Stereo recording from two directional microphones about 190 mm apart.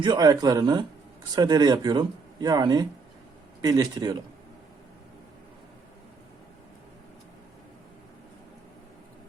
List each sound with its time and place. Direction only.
0.0 s speech: 20° right (ahead or behind)